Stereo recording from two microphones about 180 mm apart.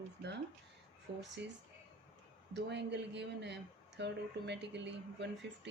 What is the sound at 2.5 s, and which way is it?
Speech, 75° right (ahead or behind).